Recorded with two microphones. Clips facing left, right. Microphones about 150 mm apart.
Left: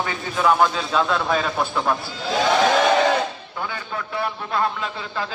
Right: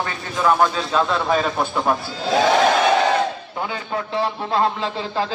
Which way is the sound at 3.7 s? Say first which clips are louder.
Right 4 dB; 30° right (ahead or behind).